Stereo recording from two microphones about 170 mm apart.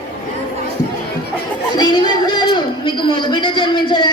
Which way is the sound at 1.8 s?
25° left (ahead or behind).